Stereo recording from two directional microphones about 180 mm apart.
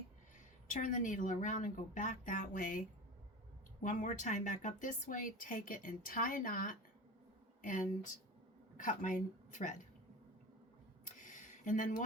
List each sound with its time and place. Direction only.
0.7 s a woman's voice: 45° left (ahead or behind)
3.8 s a woman's voice: 45° left (ahead or behind)
11.0 s a sound: 45° left (ahead or behind)